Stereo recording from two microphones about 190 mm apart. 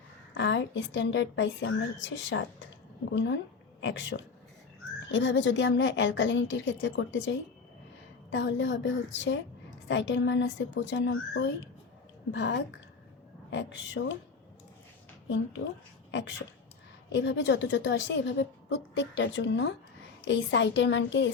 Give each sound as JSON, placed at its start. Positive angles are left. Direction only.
{"t": 0.3, "sound": "a woman's voice", "side_deg": 75}
{"t": 17.1, "sound": "a woman's voice", "side_deg": 70}